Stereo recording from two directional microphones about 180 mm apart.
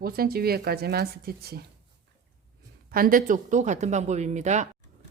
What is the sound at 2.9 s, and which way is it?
Speech, 50° right (ahead or behind).